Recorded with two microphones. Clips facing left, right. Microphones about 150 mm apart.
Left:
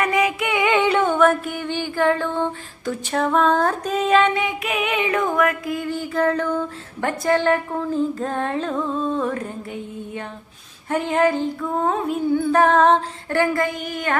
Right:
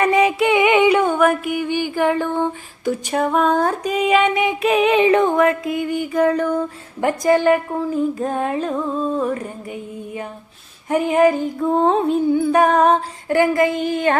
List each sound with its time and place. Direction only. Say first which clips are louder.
0.0 s a sound: right 5 dB; 30° right (ahead or behind)
4.6 s music: right 8 dB; 35° right (ahead or behind); by 11.4 s 10° right (ahead or behind)
11.6 s music: right 9 dB; 30° right (ahead or behind)
12.3 s music: left 1 dB; 15° right (ahead or behind)